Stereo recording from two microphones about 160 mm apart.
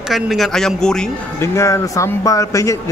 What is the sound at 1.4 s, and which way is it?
Speech, 20° left (ahead or behind).